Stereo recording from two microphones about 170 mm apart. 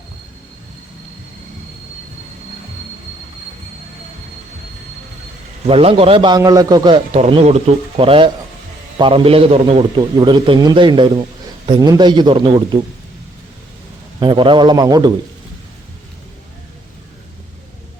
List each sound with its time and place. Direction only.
5.6 s a man's voice: 35° right (ahead or behind)
7.1 s a man's voice: 35° right (ahead or behind)
14.2 s a man's voice: 30° right (ahead or behind)